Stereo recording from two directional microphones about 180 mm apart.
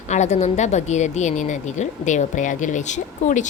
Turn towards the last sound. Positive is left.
turn(degrees=40)  # may be behind; listen again after turning